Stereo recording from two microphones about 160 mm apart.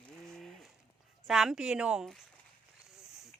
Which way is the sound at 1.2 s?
Centre (ahead or behind).